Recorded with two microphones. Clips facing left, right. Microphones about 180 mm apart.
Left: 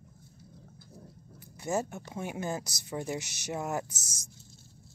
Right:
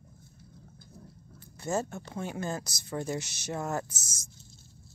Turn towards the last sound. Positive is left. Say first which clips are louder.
# even
turn(degrees=15)  # may be behind; listen again after turning